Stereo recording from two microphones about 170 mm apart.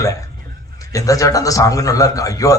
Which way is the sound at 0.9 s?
20° left (ahead or behind).